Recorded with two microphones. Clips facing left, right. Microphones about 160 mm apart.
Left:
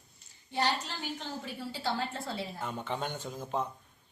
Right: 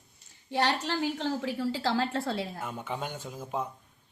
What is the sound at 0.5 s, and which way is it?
A woman's voice, 70° right (ahead or behind).